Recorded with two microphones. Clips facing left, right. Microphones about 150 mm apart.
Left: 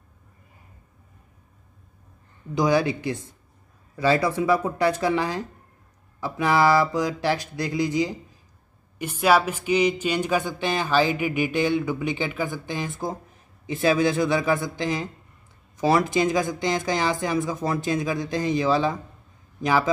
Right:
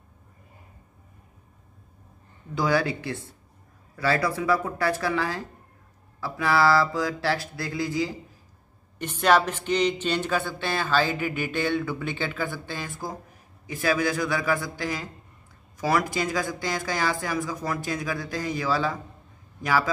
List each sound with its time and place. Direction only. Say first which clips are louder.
2.5 s speech: left 3 dB; 20° left (ahead or behind)